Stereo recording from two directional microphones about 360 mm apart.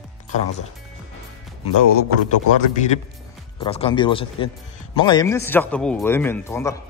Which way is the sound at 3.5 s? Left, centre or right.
Centre.